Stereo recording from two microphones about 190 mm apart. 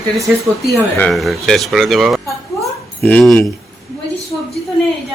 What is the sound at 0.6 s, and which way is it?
Speech, centre (ahead or behind).